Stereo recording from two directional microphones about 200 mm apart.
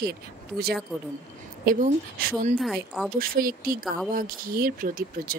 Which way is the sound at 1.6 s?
45° right (ahead or behind).